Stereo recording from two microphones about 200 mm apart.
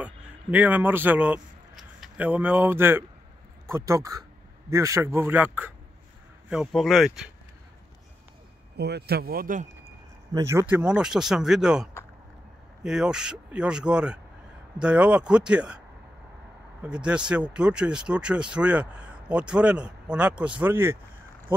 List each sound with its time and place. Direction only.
0.0 s a man's voice: 10° right (ahead or behind)
8.7 s a man's voice: 55° right (ahead or behind)
10.3 s speech: 15° right (ahead or behind)
16.8 s speech: 5° right (ahead or behind)